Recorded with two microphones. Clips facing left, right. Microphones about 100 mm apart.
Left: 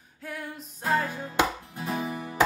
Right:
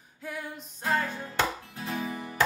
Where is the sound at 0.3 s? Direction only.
Centre (ahead or behind).